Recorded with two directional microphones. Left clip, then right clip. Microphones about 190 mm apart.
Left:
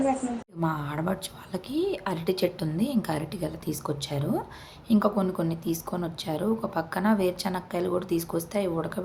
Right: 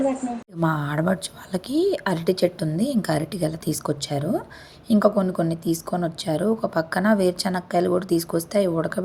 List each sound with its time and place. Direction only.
0.6 s speech: 30° right (ahead or behind)